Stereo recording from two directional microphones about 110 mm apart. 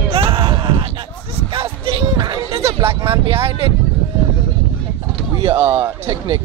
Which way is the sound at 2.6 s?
60° right (ahead or behind).